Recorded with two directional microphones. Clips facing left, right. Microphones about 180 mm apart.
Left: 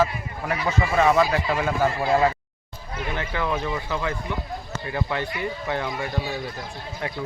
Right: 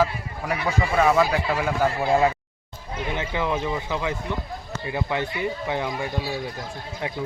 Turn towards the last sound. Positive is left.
turn(degrees=-15)  # may be behind; listen again after turning